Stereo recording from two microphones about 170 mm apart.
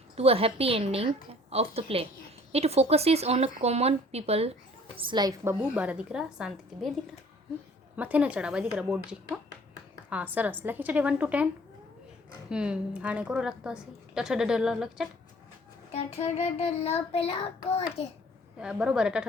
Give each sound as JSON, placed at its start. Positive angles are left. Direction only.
{"t": 0.2, "sound": "a woman's voice", "side_deg": -35}
{"t": 5.7, "sound": "a woman's voice", "side_deg": -10}
{"t": 7.9, "sound": "a woman's voice", "side_deg": -10}
{"t": 12.5, "sound": "a woman's voice", "side_deg": -5}
{"t": 15.9, "sound": "child singing", "side_deg": 40}
{"t": 18.6, "sound": "a woman's voice", "side_deg": -5}